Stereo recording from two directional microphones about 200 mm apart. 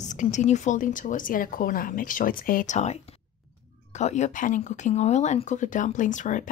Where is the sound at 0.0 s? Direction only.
35° left (ahead or behind).